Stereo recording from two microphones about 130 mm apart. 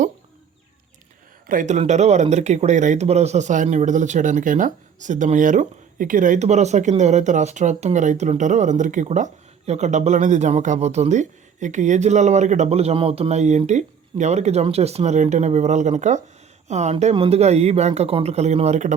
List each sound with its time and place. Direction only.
1.5 s speech: 80° right
9.0 s speech: 65° right (ahead or behind)